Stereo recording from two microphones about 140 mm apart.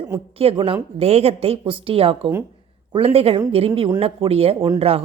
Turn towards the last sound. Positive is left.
turn(degrees=-45)  # may be behind; listen again after turning